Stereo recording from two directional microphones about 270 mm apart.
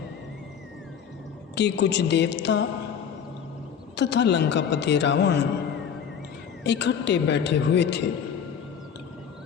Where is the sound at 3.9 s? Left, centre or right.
Left.